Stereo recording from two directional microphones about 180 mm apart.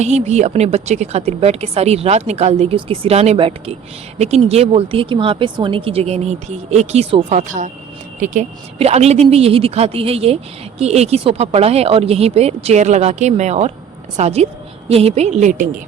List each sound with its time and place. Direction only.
0.0 s a woman's voice: 40° right (ahead or behind)